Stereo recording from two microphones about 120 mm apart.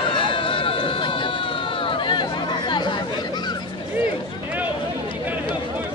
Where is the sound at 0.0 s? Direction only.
45° left (ahead or behind).